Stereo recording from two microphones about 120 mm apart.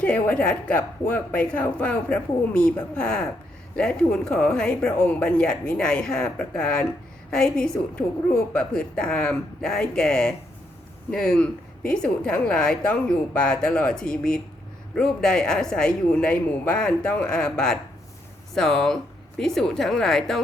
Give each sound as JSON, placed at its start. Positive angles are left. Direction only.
{"t": 0.0, "sound": "a woman's voice", "side_deg": 10}